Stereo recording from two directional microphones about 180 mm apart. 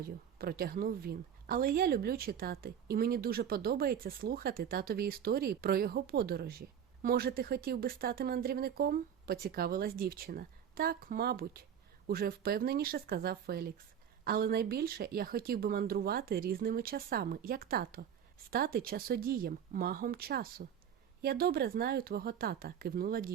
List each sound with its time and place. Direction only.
0.0 s a woman's voice: 55° right (ahead or behind)